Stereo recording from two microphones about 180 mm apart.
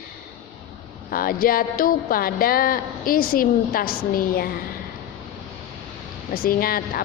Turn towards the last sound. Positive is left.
turn(degrees=55)  # may be behind; listen again after turning